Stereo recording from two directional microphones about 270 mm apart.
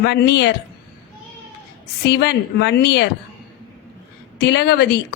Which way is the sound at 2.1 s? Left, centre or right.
Left.